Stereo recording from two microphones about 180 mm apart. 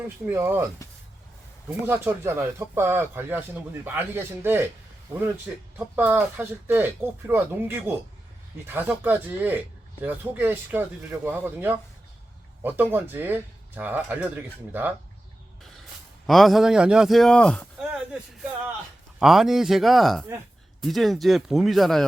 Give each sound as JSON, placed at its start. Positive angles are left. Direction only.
{"t": 0.3, "sound": "speech", "side_deg": -15}
{"t": 0.8, "sound": "a sound", "side_deg": 15}
{"t": 1.8, "sound": "speech", "side_deg": -10}
{"t": 5.7, "sound": "speech", "side_deg": -10}
{"t": 16.2, "sound": "a man's voice", "side_deg": 0}